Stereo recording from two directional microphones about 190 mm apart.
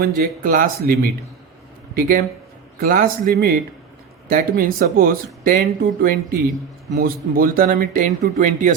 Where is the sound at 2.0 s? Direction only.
50° right (ahead or behind).